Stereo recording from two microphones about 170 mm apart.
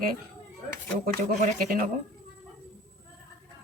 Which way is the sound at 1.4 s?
55° right (ahead or behind).